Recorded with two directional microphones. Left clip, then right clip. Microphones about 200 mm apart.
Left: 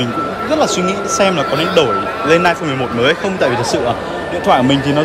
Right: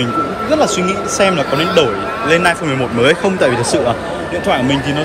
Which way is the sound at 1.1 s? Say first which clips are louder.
Right 1 dB; 15° left (ahead or behind).